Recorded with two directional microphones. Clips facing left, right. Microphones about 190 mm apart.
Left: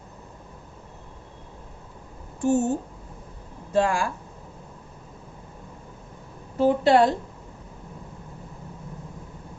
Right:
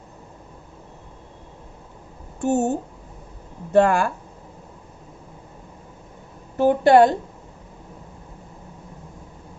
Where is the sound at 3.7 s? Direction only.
60° right (ahead or behind).